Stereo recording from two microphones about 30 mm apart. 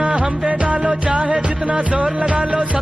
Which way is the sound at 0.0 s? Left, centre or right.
Right.